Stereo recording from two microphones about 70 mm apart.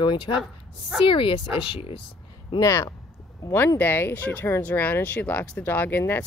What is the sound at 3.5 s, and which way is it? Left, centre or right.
Speech, left.